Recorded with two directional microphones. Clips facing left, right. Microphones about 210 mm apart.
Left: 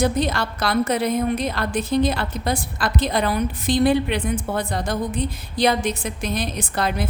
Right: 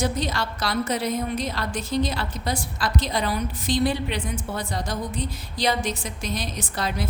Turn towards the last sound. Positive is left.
turn(degrees=55)  # may be behind; listen again after turning